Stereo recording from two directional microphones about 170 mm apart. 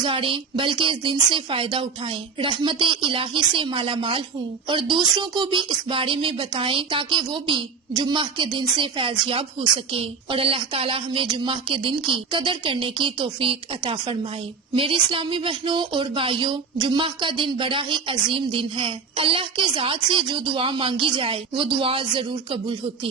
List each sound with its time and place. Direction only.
0.0 s a woman's voice: 30° right (ahead or behind)